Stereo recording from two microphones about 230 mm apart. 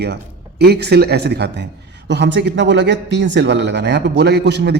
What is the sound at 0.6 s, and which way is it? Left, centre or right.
A man's voice, right.